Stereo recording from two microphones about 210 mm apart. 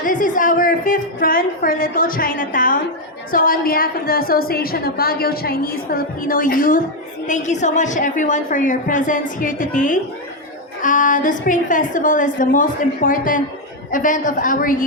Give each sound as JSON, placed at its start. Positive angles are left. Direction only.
{"t": 0.0, "sound": "a woman's voice", "side_deg": 40}